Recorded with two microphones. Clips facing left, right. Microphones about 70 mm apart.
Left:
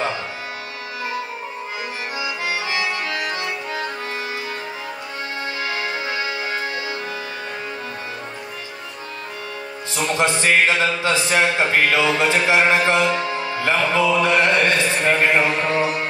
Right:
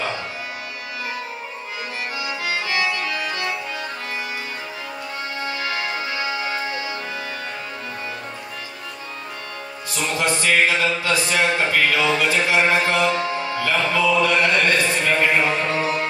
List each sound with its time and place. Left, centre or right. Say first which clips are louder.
2.1 s accordion: left 1 dB; left
5.4 s music: even; left
9.9 s speech: left 2 dB; left
13.2 s music: even; left